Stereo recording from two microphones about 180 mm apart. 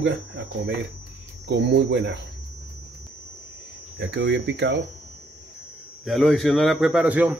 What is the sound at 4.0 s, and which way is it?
Speech, 70° right (ahead or behind).